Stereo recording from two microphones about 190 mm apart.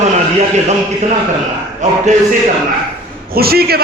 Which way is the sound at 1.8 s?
40° right (ahead or behind).